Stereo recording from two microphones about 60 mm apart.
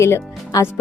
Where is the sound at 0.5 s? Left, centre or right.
Left.